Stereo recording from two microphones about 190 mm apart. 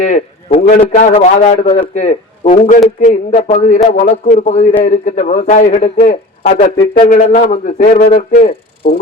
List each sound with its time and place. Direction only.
0.0 s a man's voice: 35° left (ahead or behind)
8.4 s speech: 50° left (ahead or behind)